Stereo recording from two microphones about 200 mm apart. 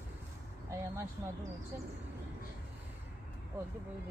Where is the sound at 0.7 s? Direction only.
15° right (ahead or behind).